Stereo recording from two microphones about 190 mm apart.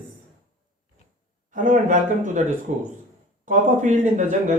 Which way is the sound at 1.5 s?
40° right (ahead or behind).